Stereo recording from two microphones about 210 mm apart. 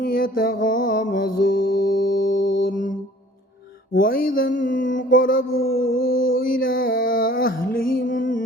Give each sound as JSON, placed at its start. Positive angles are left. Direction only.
{"t": 0.0, "sound": "mantra", "side_deg": 45}
{"t": 3.9, "sound": "mantra", "side_deg": 40}